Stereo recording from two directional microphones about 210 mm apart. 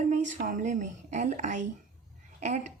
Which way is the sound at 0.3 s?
40° right (ahead or behind).